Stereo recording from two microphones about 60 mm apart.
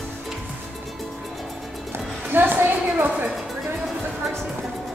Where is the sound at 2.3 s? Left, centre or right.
Right.